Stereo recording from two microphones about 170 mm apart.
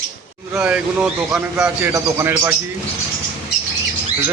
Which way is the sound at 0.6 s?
5° right (ahead or behind).